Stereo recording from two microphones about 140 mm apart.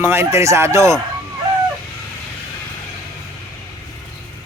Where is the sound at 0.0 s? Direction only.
20° right (ahead or behind).